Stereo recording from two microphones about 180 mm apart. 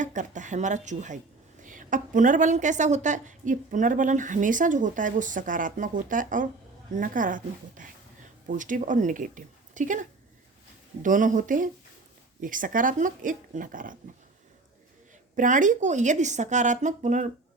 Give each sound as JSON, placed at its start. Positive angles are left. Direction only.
{"t": 0.0, "sound": "a woman's voice", "side_deg": -45}
{"t": 15.4, "sound": "a woman's voice", "side_deg": -45}